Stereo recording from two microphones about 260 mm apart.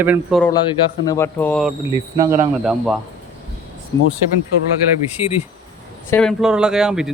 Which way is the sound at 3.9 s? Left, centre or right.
Centre.